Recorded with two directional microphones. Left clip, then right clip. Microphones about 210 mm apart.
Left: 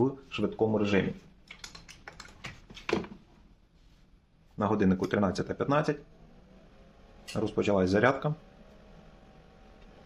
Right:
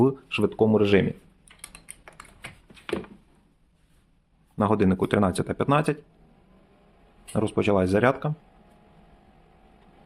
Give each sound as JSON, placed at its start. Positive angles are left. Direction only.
{"t": 0.0, "sound": "speech", "side_deg": -45}
{"t": 4.5, "sound": "speech", "side_deg": -40}
{"t": 7.3, "sound": "speech", "side_deg": -35}